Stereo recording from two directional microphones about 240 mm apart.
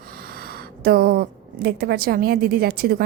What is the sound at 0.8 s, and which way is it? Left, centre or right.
A woman's voice, right.